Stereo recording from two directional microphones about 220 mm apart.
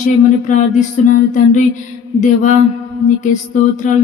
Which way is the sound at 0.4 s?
35° left (ahead or behind).